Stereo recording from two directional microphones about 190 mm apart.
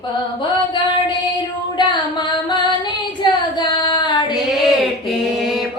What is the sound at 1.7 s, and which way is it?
Female singing, 25° left (ahead or behind).